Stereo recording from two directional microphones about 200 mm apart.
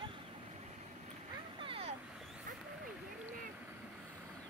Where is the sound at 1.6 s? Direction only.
30° right (ahead or behind).